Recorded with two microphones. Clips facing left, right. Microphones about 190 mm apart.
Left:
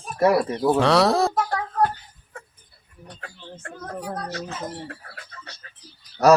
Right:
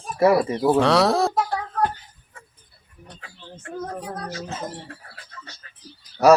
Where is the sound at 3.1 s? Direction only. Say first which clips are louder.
Left 3 dB; 55° left (ahead or behind).